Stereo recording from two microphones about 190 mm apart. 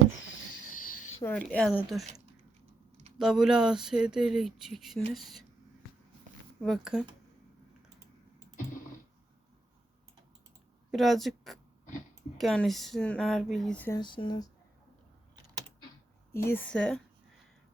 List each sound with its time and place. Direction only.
0.7 s a sound: 45° left (ahead or behind)
1.2 s speech: 5° left (ahead or behind)
3.2 s speech: centre (ahead or behind)
6.6 s speech: centre (ahead or behind)
10.9 s speech: centre (ahead or behind)
14.0 s speech: 25° left (ahead or behind)
16.5 s speech: 5° left (ahead or behind)